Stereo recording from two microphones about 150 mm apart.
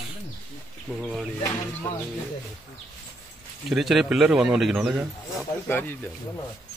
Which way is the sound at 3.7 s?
Centre (ahead or behind).